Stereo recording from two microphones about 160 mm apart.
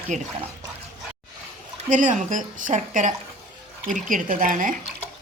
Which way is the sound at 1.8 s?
55° right (ahead or behind).